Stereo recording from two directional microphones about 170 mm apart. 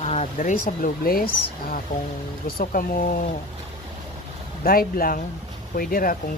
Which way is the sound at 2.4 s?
55° left (ahead or behind).